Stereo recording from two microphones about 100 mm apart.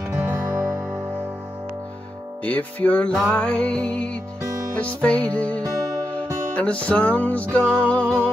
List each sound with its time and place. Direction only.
0.1 s music: 20° right (ahead or behind)
2.4 s music: 15° left (ahead or behind)